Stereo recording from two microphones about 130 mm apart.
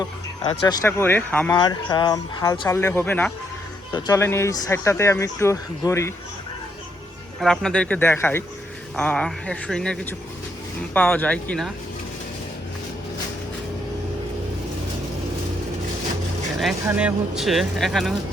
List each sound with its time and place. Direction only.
0.9 s speech: 15° left (ahead or behind)
1.5 s speech: 35° left (ahead or behind); by 3.3 s 10° left (ahead or behind)
3.9 s speech: 30° left (ahead or behind)
7.4 s speech: 5° left (ahead or behind)
9.0 s speech: 5° left (ahead or behind)
16.9 s speech: 10° right (ahead or behind)